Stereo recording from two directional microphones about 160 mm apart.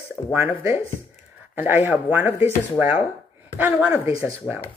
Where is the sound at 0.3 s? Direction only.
10° right (ahead or behind).